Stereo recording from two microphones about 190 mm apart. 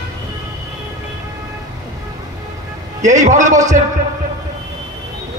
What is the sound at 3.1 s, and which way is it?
Speech, 40° right (ahead or behind).